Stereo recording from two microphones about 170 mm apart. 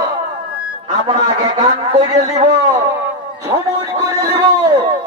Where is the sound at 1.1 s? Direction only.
35° right (ahead or behind).